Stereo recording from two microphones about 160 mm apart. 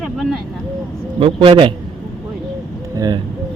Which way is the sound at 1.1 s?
35° right (ahead or behind).